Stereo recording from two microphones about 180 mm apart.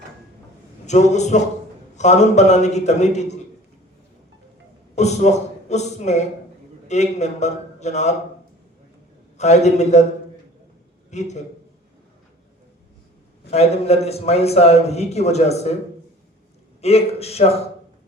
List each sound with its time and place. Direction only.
0.9 s a man's voice: 40° left (ahead or behind)
4.9 s a man's voice: 40° left (ahead or behind)
9.4 s a man's voice: 40° left (ahead or behind)
11.1 s a man's voice: 40° left (ahead or behind)
13.5 s a man's voice: 35° left (ahead or behind)
16.8 s a man's voice: 35° left (ahead or behind)